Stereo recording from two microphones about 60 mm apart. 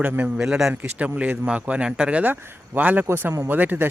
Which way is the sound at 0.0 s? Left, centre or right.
Right.